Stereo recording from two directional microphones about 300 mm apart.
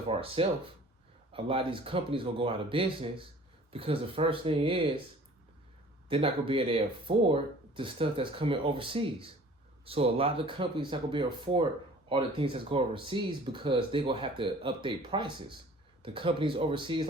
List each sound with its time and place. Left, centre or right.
0.1 s speech: centre
6.1 s speech: centre